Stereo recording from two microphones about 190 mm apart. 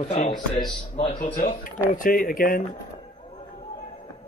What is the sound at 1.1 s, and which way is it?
Speech, 45° left (ahead or behind).